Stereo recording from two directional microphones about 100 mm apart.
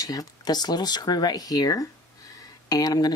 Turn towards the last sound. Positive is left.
turn(degrees=40)  # may be behind; listen again after turning